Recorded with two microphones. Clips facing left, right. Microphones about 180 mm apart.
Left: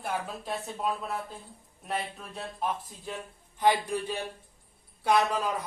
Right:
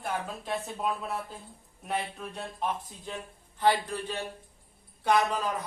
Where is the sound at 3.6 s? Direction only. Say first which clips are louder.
Left 1 dB; 15° left (ahead or behind).